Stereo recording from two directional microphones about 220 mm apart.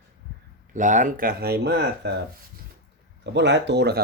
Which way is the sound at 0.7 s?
35° right (ahead or behind).